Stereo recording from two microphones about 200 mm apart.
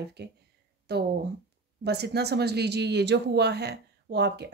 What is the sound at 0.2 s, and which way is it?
Speech, 55° right (ahead or behind).